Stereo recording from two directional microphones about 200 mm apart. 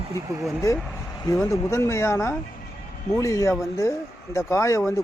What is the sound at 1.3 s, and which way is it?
Speech, 15° left (ahead or behind).